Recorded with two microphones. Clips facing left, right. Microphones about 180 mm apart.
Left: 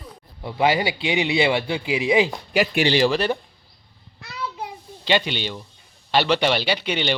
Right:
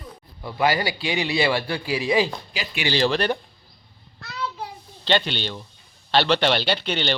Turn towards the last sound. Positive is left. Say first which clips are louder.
# left 1 dB
turn(degrees=10)  # may be behind; listen again after turning